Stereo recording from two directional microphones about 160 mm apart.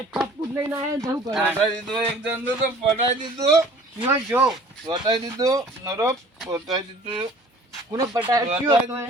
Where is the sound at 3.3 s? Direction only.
20° right (ahead or behind).